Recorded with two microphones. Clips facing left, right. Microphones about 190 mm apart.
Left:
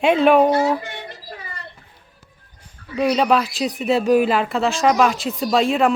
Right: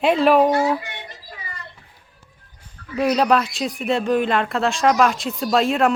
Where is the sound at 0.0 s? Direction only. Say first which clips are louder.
Left 1 dB; centre (ahead or behind).